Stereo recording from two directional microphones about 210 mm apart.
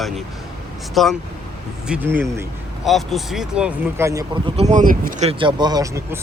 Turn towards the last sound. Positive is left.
turn(degrees=-15)  # may be behind; listen again after turning